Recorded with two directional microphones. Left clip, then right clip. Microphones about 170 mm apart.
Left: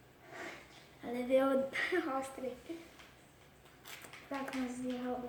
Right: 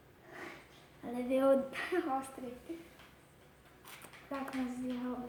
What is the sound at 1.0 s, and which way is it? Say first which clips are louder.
A woman's voice: even; 15° right (ahead or behind).